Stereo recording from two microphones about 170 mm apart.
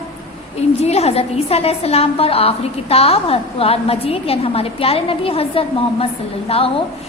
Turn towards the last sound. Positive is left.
turn(degrees=35)  # may be behind; listen again after turning